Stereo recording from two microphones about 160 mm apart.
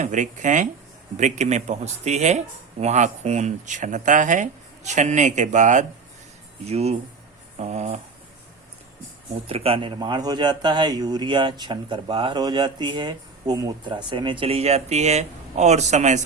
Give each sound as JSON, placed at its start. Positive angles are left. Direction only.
{"t": 0.0, "sound": "speech", "side_deg": -50}
{"t": 9.5, "sound": "a man's voice", "side_deg": -35}